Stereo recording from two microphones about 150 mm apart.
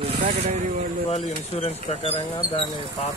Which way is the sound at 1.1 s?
45° left (ahead or behind).